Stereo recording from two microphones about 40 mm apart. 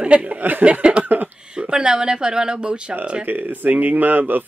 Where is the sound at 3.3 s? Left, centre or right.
Right.